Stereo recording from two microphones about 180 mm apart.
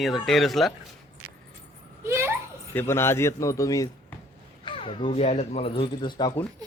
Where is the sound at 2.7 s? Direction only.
15° left (ahead or behind).